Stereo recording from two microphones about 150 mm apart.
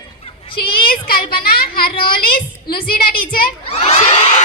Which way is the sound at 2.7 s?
85° left.